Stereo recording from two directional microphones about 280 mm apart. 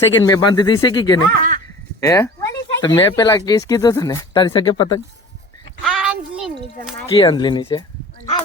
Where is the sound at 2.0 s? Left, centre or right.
Centre.